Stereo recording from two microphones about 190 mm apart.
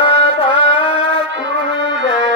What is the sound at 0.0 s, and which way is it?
Music, 25° left (ahead or behind).